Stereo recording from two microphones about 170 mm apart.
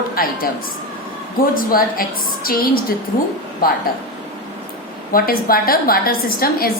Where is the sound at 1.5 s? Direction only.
55° left (ahead or behind).